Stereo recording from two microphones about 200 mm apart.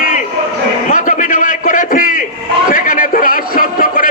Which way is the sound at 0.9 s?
40° left (ahead or behind).